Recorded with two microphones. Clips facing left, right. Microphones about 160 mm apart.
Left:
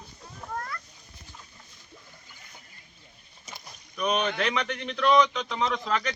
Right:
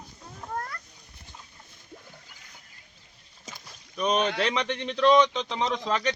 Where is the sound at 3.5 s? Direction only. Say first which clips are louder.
Right 1 dB; 90° right.